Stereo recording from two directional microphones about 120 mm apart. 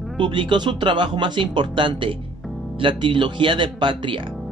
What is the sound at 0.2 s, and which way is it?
Speech, 40° right (ahead or behind).